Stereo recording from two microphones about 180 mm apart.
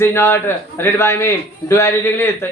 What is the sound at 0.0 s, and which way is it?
A man's voice, 15° left (ahead or behind).